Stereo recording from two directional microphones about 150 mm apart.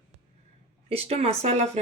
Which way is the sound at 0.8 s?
40° right (ahead or behind).